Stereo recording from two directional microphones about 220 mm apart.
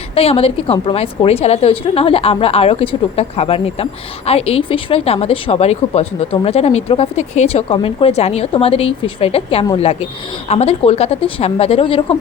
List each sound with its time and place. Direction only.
0.1 s a woman's voice: 25° left (ahead or behind)